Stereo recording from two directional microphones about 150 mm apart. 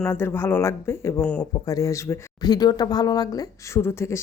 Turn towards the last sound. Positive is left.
turn(degrees=20)  # may be behind; listen again after turning